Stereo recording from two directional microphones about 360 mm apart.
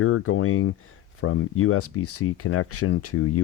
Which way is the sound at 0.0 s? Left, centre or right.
Left.